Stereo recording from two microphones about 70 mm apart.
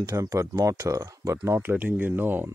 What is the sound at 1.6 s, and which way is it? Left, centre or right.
Speech, right.